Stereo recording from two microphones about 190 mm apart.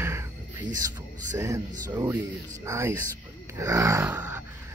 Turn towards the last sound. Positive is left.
turn(degrees=-10)  # may be behind; listen again after turning